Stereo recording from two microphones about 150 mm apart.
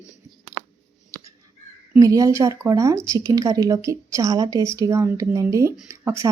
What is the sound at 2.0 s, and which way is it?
Speech, 20° right (ahead or behind).